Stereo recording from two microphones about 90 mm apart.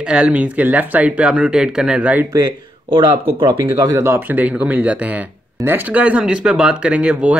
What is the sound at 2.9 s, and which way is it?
Speech, 65° right (ahead or behind).